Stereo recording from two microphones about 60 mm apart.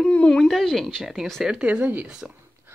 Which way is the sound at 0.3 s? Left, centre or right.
Centre.